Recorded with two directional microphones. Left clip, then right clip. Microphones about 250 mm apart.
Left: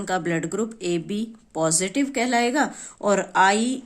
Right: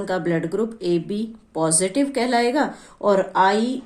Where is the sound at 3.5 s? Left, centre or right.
Left.